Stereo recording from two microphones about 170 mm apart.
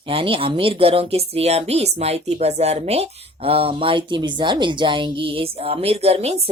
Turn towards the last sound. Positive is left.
turn(degrees=-35)  # may be behind; listen again after turning